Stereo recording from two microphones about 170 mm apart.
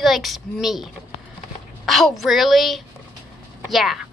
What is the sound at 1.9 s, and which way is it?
A woman's voice, centre (ahead or behind).